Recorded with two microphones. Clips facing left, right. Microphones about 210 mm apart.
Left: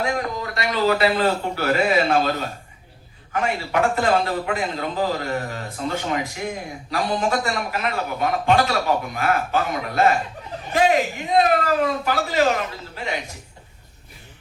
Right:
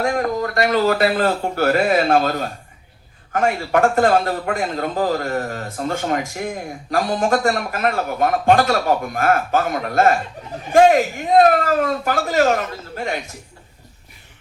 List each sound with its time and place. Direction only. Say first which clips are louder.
0.0 s a man's voice: right 5 dB; 50° right (ahead or behind)
3.3 s a man's voice: right 4 dB; 50° right (ahead or behind)